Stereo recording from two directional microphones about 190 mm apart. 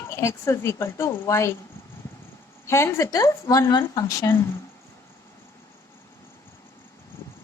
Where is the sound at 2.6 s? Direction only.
15° left (ahead or behind).